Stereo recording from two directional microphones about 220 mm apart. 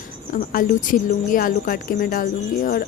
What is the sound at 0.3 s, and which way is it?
Speech, 40° left (ahead or behind).